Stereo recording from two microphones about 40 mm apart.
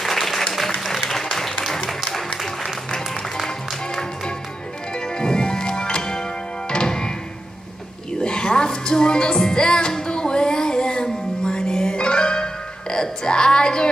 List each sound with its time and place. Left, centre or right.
0.0 s applause: centre
3.4 s music: centre
8.2 s music: left